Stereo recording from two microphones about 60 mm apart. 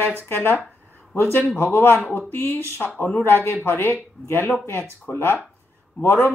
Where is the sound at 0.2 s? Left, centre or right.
Left.